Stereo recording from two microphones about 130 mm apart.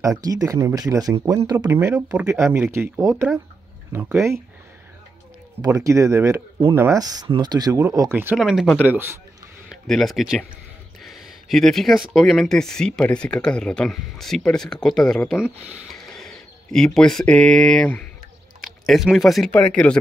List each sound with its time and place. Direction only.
0.0 s speech: 30° right (ahead or behind)
5.9 s speech: 25° right (ahead or behind)
7.0 s speech: 30° right (ahead or behind)
8.4 s speech: centre (ahead or behind)
8.8 s speech: 15° right (ahead or behind)
9.7 s speech: centre (ahead or behind)
18.6 s speech: 5° right (ahead or behind)
19.5 s speech: 10° left (ahead or behind)